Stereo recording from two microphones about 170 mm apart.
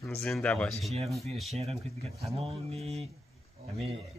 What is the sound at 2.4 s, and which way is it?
Speech, 35° right (ahead or behind).